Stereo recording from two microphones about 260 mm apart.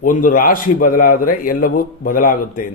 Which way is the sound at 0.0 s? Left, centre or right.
Left.